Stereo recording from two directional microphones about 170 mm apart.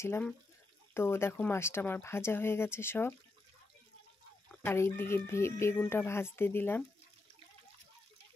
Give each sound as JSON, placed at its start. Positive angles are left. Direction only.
{"t": 0.0, "sound": "speech", "side_deg": 15}
{"t": 4.6, "sound": "speech", "side_deg": 15}